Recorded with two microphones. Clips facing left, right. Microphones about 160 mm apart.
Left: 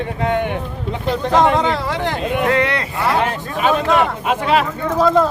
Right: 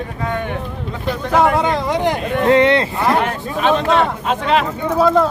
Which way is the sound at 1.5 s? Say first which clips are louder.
Right 1 dB; 15° right (ahead or behind).